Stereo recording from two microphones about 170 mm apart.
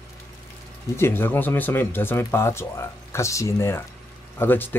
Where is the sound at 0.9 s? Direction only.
15° left (ahead or behind).